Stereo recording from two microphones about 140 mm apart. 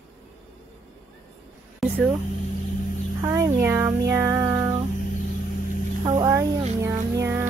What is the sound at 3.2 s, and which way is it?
Music, 20° right (ahead or behind).